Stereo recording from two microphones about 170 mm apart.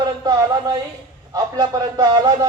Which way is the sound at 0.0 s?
25° right (ahead or behind).